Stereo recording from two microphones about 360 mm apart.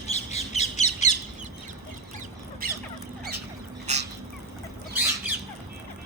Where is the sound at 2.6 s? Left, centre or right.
Right.